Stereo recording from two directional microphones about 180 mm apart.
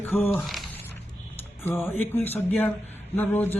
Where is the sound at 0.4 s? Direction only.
Centre (ahead or behind).